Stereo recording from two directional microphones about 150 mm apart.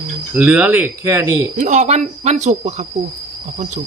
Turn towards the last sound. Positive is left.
turn(degrees=-50)  # may be behind; listen again after turning